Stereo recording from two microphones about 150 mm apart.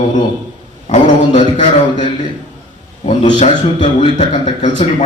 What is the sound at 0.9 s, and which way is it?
A man's voice, 50° left (ahead or behind).